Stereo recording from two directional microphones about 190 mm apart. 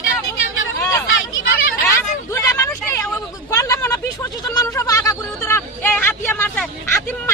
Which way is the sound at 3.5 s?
15° left (ahead or behind).